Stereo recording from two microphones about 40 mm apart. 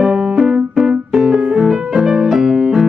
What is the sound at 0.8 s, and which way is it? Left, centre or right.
Keyboard, centre.